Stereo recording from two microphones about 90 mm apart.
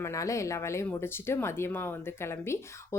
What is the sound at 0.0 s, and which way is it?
A woman's voice, 35° left (ahead or behind).